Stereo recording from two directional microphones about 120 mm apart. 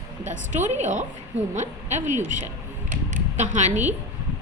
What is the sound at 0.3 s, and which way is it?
Speech, 80° right.